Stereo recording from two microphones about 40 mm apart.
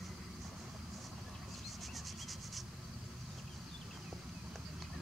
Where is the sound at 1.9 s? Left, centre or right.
Centre.